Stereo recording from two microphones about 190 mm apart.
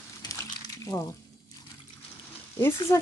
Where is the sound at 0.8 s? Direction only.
15° left (ahead or behind).